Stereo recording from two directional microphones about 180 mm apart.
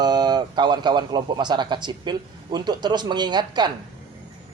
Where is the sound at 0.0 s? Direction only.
25° right (ahead or behind).